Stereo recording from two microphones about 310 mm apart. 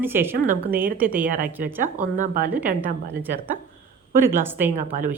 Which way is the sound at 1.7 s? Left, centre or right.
Centre.